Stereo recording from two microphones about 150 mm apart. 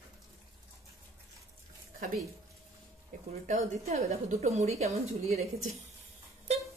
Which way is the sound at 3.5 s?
45° right (ahead or behind).